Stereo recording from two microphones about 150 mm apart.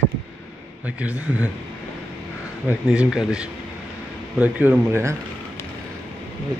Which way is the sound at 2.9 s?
5° right (ahead or behind).